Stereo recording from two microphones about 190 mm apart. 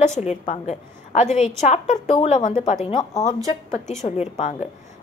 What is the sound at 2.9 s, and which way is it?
Speech, 20° left (ahead or behind).